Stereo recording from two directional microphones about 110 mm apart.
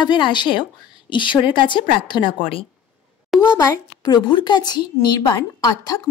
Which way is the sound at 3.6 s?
35° left (ahead or behind).